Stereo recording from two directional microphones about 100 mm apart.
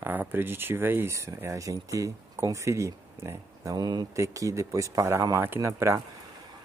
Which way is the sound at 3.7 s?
40° right (ahead or behind).